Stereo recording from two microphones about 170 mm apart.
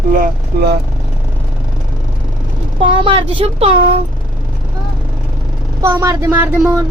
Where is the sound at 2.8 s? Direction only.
30° right (ahead or behind).